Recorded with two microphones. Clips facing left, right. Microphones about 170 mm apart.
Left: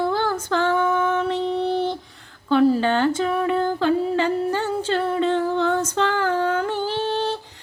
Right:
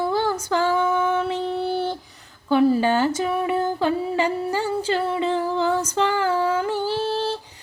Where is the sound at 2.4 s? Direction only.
5° right (ahead or behind).